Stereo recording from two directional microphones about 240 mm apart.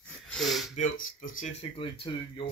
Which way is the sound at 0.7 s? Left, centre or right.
Left.